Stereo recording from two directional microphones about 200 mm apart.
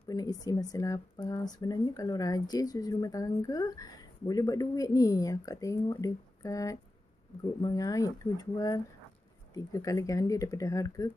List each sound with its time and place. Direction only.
0.1 s speech: 20° left (ahead or behind)